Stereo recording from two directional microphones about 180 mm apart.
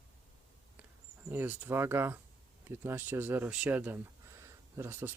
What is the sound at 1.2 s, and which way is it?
Speech, 10° right (ahead or behind).